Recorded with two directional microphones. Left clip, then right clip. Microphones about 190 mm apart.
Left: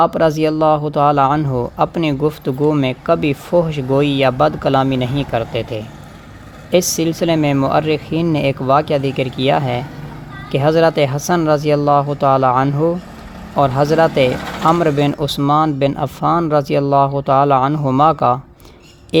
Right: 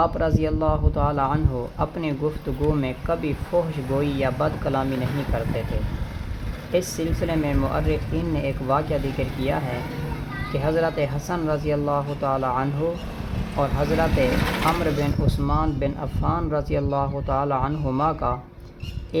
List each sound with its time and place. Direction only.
0.0 s speech: 45° left (ahead or behind)
6.7 s speech: 45° left (ahead or behind)